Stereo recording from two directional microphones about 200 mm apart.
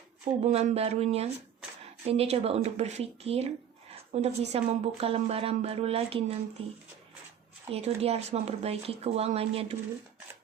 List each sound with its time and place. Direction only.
0.4 s speech: 35° right (ahead or behind)